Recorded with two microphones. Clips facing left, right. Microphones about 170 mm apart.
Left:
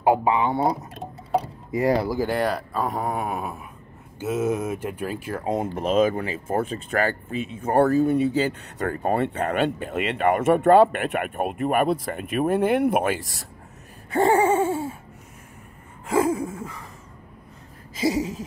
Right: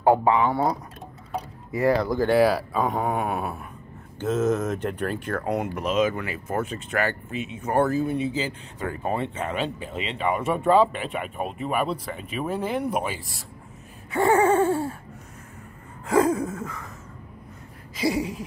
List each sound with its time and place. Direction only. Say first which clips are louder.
0.0 s a sound: right 1 dB; 15° left (ahead or behind)
1.7 s speech: even; 15° left (ahead or behind)
2.0 s speech: right 4 dB; 5° left (ahead or behind)
5.8 s speech: left 5 dB; 35° left (ahead or behind)
8.3 s speech: left 5 dB; 60° left (ahead or behind)
8.9 s speech: left 4 dB; 45° left (ahead or behind)
14.6 s speech: right 2 dB; centre (ahead or behind)
16.1 s a sound: right 1 dB; 25° left (ahead or behind)